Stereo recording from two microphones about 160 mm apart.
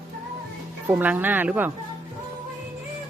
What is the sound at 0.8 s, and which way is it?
Speech, 10° right (ahead or behind).